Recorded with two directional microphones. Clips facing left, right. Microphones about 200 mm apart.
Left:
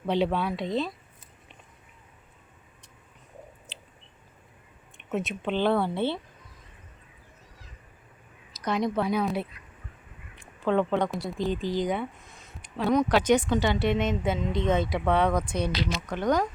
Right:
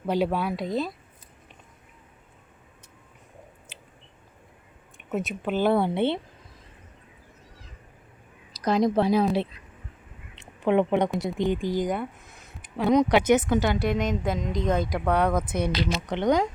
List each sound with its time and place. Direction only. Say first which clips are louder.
0.0 s speech: right 1 dB; 5° right (ahead or behind)
4.9 s speech: right 1 dB; centre (ahead or behind); by 6.1 s 20° right (ahead or behind)
8.5 s a woman's voice: right 5 dB; 35° right (ahead or behind)
10.6 s speech: right 3 dB; 20° right (ahead or behind)
11.9 s a sound: right 1 dB; 5° right (ahead or behind)
12.9 s speech: right 2 dB; 15° right (ahead or behind)
15.9 s speech: right 4 dB; 25° right (ahead or behind)